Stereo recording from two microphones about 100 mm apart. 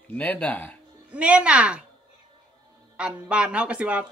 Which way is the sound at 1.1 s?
10° right (ahead or behind).